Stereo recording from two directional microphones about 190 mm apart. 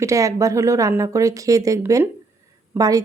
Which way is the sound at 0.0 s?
15° right (ahead or behind).